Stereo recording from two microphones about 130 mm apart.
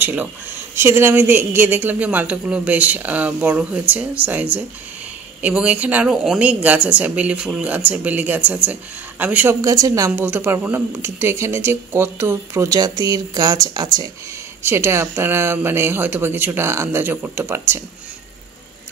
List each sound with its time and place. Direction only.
0.0 s a sound: 15° right (ahead or behind)
0.7 s a woman's voice: 20° right (ahead or behind)
14.6 s speech: 20° right (ahead or behind)